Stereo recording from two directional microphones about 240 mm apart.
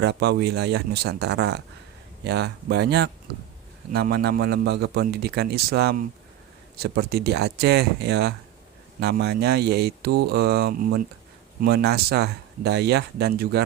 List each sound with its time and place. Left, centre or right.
0.0 s a man's voice: right